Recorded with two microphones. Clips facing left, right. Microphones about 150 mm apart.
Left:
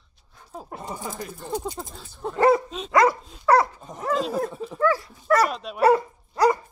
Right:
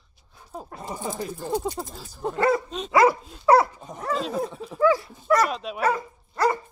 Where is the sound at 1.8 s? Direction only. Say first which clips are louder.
Right 2 dB; 5° right (ahead or behind).